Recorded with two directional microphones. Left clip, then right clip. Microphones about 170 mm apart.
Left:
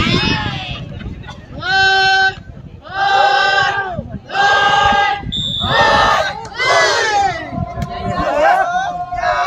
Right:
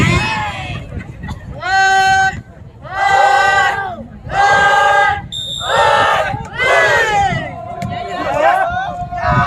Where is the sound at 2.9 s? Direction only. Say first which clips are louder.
Right 1 dB; 40° right (ahead or behind).